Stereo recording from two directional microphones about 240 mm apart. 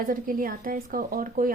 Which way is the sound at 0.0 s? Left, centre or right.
Right.